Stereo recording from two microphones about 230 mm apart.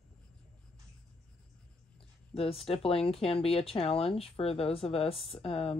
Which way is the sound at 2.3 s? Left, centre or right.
Left.